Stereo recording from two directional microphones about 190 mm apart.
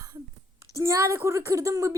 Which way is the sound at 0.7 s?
15° right (ahead or behind).